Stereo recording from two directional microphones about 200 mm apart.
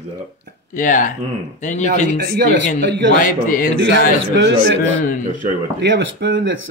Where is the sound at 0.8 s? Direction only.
40° left (ahead or behind).